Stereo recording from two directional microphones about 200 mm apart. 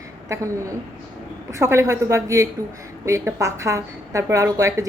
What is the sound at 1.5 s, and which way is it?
A woman's voice, 15° right (ahead or behind).